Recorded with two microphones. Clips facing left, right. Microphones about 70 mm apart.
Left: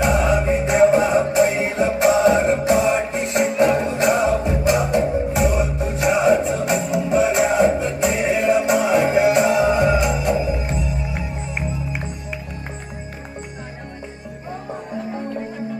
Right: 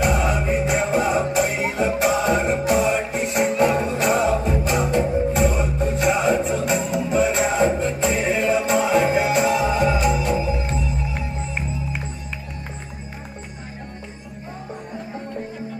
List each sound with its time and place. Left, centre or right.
0.0 s music: left